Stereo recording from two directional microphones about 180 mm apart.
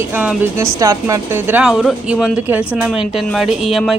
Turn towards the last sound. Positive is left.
turn(degrees=0)  # may be behind; listen again after turning